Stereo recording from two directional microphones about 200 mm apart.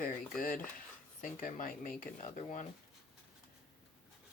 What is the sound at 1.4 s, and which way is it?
Speech, 45° left (ahead or behind).